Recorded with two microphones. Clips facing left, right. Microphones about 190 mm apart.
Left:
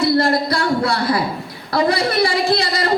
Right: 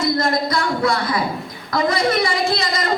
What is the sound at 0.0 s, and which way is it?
A woman's voice, 35° left (ahead or behind).